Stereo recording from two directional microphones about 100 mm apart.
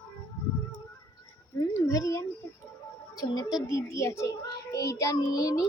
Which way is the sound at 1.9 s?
35° left (ahead or behind).